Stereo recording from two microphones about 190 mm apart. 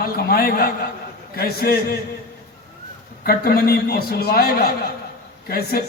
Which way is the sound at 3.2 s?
55° left (ahead or behind).